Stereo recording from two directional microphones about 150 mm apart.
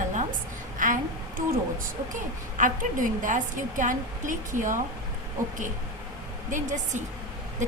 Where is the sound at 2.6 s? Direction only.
60° right (ahead or behind).